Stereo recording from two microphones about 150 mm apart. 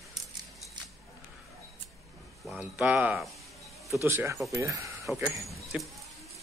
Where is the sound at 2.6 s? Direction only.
10° right (ahead or behind).